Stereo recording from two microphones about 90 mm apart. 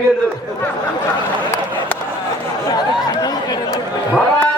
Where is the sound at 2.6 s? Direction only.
50° left (ahead or behind).